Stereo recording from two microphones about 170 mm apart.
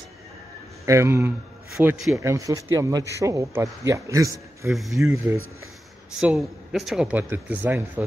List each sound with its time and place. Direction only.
0.8 s speech: 15° right (ahead or behind)
1.8 s a man's voice: 5° right (ahead or behind)
2.1 s speech: 20° right (ahead or behind)
4.7 s a man's voice: centre (ahead or behind)
5.1 s speech: 15° right (ahead or behind)
6.1 s speech: centre (ahead or behind)